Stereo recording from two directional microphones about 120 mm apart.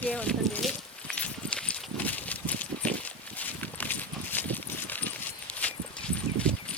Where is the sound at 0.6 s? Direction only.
10° left (ahead or behind).